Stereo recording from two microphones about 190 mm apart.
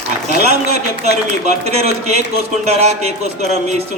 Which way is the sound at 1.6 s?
35° right (ahead or behind).